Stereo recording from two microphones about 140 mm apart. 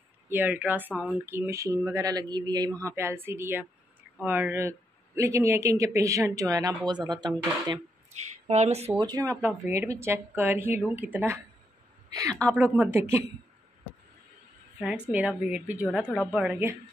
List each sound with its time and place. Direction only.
0.3 s speech: 15° right (ahead or behind)
0.9 s speech: centre (ahead or behind)
1.2 s speech: 15° right (ahead or behind); by 7.8 s 30° right (ahead or behind)
8.5 s speech: 50° right (ahead or behind)
8.9 s speech: 30° right (ahead or behind)
9.4 s speech: 20° right (ahead or behind)
12.1 s a woman's voice: 25° right (ahead or behind)
12.5 s speech: 15° right (ahead or behind)
15.0 s speech: 10° right (ahead or behind)